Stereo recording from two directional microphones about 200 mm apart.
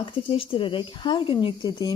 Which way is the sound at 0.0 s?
25° left (ahead or behind).